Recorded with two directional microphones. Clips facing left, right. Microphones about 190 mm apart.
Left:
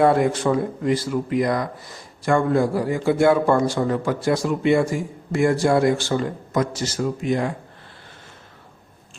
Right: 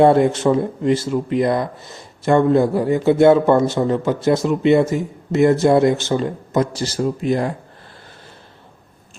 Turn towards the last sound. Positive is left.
turn(degrees=-35)  # may be behind; listen again after turning